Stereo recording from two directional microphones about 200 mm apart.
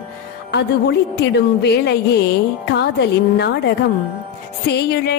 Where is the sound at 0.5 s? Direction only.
60° left (ahead or behind).